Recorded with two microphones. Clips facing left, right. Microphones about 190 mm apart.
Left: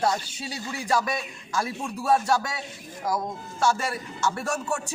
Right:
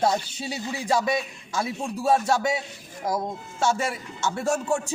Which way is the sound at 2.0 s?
25° right (ahead or behind).